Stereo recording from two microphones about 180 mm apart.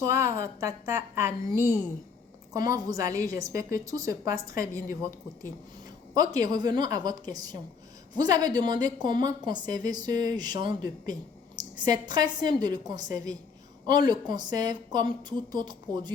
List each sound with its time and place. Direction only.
0.0 s a woman's voice: 15° right (ahead or behind)